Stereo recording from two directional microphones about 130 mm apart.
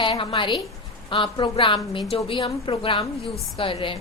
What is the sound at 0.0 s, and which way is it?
A woman's voice, 40° left (ahead or behind).